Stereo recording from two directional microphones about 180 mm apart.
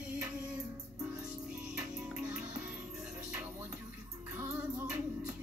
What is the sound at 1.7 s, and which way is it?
Music, 5° right (ahead or behind).